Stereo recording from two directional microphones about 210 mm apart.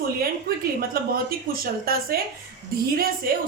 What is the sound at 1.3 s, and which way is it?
Speech, 45° right (ahead or behind).